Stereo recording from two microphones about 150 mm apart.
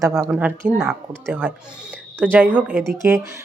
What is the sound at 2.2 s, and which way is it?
Speech, 10° right (ahead or behind).